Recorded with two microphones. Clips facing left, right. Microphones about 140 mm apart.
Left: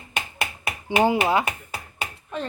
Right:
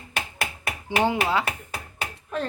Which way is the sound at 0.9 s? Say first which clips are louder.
Left 3 dB; 10° left (ahead or behind).